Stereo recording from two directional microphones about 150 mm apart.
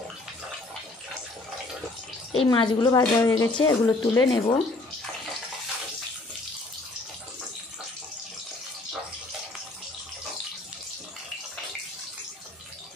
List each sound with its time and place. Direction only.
2.3 s speech: 30° left (ahead or behind)